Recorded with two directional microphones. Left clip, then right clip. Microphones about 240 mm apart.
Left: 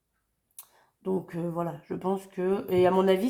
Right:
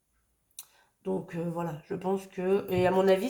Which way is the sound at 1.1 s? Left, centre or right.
Left.